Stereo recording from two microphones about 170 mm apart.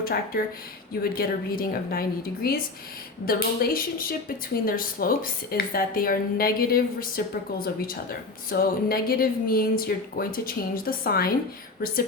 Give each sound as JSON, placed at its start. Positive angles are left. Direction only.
{"t": 0.0, "sound": "a woman's voice", "side_deg": 65}